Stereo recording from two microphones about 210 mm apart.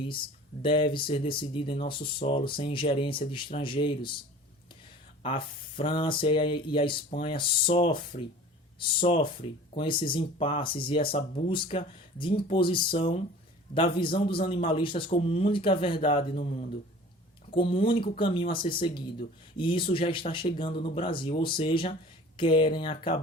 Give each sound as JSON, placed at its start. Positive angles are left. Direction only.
{"t": 0.6, "sound": "speech", "side_deg": 25}
{"t": 5.2, "sound": "speech", "side_deg": 25}
{"t": 8.1, "sound": "speech", "side_deg": 35}
{"t": 9.0, "sound": "speech", "side_deg": 25}
{"t": 19.5, "sound": "speech", "side_deg": 25}